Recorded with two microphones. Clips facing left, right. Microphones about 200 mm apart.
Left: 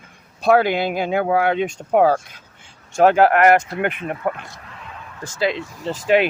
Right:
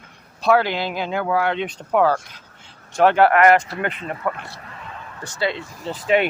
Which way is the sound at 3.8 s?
60° left (ahead or behind).